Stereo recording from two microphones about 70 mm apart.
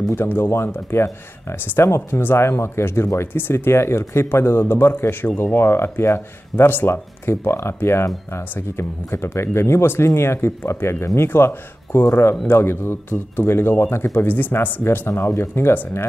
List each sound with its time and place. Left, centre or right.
0.1 s speech: left